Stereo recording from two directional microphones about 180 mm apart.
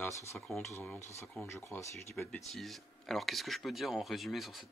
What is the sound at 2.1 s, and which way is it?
Speech, 5° left (ahead or behind).